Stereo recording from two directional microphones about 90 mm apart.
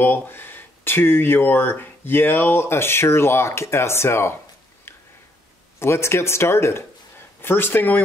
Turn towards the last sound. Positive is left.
turn(degrees=20)  # may be behind; listen again after turning